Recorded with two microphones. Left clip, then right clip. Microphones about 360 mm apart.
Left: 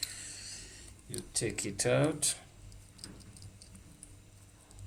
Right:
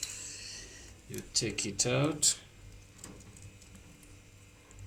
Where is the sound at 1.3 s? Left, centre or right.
Centre.